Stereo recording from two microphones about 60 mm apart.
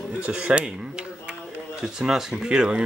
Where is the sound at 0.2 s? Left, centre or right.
Centre.